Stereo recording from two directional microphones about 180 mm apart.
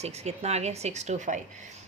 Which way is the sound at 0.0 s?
35° right (ahead or behind).